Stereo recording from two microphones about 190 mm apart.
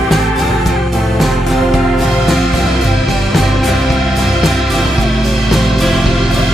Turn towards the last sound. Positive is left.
turn(degrees=0)  # may be behind; listen again after turning